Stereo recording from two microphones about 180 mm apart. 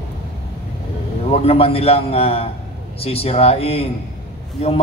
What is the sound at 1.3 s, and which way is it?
A man's voice, 35° left (ahead or behind).